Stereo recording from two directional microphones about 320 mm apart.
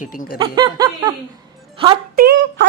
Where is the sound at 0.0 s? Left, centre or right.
Left.